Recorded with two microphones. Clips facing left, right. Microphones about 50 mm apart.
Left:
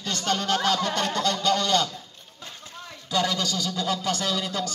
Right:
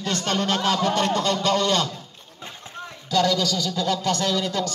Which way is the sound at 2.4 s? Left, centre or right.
Right.